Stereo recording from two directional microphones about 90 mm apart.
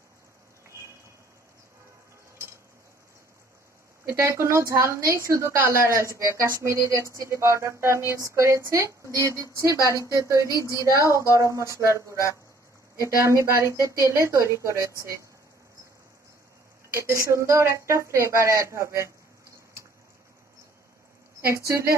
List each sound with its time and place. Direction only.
4.1 s speech: 30° right (ahead or behind)
10.5 s a woman's voice: 35° left (ahead or behind)
11.0 s speech: 35° right (ahead or behind)
16.9 s speech: 30° right (ahead or behind)
21.5 s speech: 30° right (ahead or behind)